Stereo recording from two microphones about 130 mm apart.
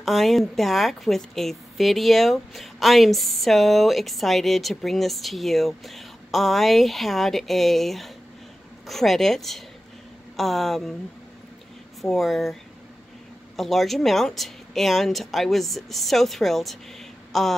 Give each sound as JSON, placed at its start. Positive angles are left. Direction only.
{"t": 0.0, "sound": "a woman's voice", "side_deg": 0}
{"t": 12.0, "sound": "a woman's voice", "side_deg": 0}
{"t": 13.6, "sound": "a woman's voice", "side_deg": 0}